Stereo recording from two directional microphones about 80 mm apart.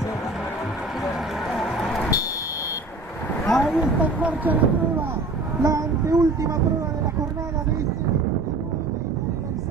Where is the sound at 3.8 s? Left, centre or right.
Centre.